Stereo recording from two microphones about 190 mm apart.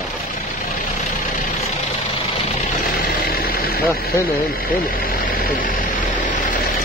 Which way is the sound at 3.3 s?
55° left (ahead or behind).